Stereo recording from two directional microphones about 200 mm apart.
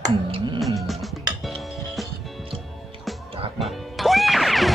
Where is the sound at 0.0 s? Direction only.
25° right (ahead or behind).